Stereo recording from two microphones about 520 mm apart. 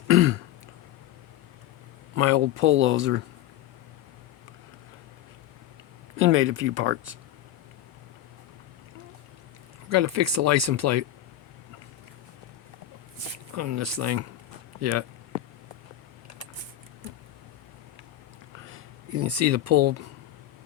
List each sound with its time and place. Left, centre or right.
0.1 s throat clearing: right
2.1 s speech: right
6.1 s speech: right
9.9 s speech: right
13.6 s speech: right
18.7 s speech: right